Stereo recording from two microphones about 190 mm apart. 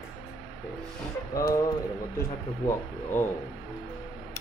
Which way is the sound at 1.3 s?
15° left (ahead or behind).